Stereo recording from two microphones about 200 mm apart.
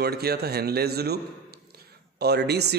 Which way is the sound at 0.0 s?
50° right (ahead or behind).